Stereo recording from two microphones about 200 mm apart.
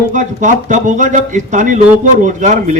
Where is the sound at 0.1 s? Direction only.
40° right (ahead or behind).